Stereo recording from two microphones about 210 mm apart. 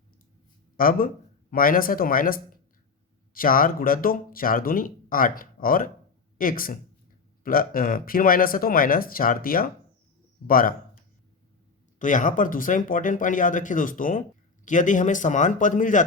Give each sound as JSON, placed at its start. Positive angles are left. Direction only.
{"t": 0.8, "sound": "speech", "side_deg": 40}
{"t": 11.9, "sound": "speech", "side_deg": 40}